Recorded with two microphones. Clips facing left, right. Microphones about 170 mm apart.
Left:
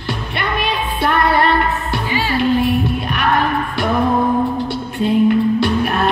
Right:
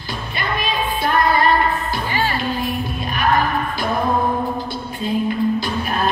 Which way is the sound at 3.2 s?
70° left (ahead or behind).